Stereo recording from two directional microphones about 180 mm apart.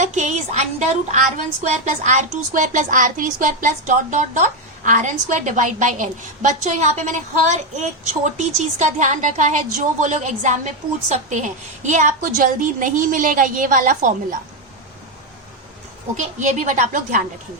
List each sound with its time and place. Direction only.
0.0 s a woman's voice: 40° right (ahead or behind)
16.1 s speech: 40° right (ahead or behind)